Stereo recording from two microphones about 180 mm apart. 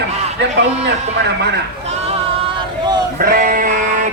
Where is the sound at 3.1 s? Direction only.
50° right (ahead or behind).